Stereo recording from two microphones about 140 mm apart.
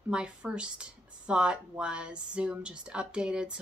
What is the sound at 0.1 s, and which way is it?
A woman's voice, 5° right (ahead or behind).